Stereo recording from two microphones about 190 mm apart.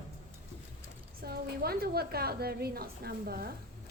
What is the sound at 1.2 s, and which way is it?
A woman's voice, 55° right (ahead or behind).